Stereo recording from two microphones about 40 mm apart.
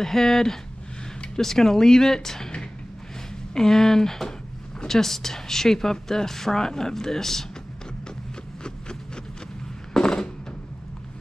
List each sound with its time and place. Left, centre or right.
0.0 s a woman's voice: centre
3.5 s a woman's voice: centre
8.6 s a sound: centre